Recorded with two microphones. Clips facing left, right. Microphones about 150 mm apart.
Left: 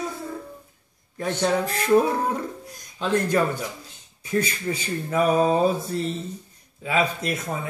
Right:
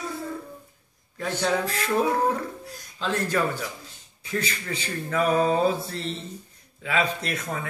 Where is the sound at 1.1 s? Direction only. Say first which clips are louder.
Left 3 dB; 25° left (ahead or behind).